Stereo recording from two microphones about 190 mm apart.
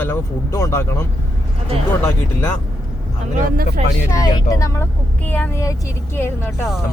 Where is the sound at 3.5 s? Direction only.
50° right (ahead or behind).